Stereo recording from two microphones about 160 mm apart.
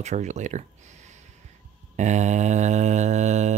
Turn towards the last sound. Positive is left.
turn(degrees=-45)  # may be behind; listen again after turning